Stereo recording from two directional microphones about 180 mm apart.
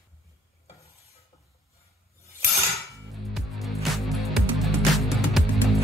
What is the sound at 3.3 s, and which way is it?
Music, centre (ahead or behind).